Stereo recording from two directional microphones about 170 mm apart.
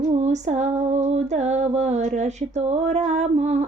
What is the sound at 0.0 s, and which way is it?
Female singing, 40° right (ahead or behind).